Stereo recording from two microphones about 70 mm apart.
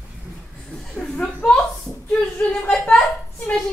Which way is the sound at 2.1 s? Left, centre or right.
Centre.